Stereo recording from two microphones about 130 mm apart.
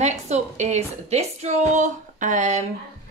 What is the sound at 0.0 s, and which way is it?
A woman's voice, 60° right (ahead or behind).